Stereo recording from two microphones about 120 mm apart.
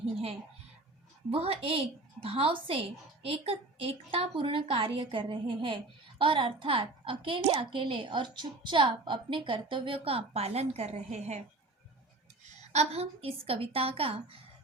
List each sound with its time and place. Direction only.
1.3 s a woman's voice: 55° right (ahead or behind); by 11.4 s 70° right (ahead or behind)
12.7 s a woman's voice: 60° right (ahead or behind)